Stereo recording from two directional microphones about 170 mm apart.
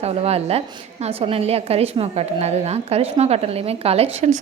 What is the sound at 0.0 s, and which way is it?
A woman's voice, 35° right (ahead or behind).